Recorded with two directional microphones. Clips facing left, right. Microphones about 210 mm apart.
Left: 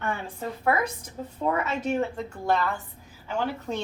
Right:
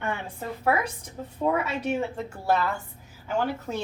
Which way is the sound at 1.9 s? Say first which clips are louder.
Left 1 dB; 10° right (ahead or behind).